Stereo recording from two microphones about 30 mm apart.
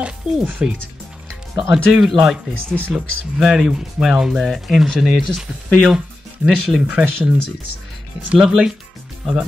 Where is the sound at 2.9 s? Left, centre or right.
Right.